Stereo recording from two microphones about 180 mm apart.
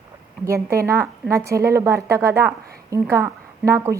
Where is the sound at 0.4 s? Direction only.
15° right (ahead or behind).